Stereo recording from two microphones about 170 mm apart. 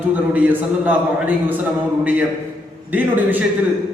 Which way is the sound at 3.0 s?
10° right (ahead or behind).